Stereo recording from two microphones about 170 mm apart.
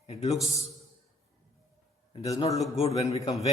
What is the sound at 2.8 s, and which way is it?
Speech, 35° left (ahead or behind).